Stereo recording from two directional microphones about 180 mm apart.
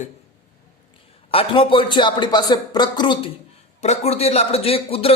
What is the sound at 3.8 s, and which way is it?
Speech, 35° left (ahead or behind).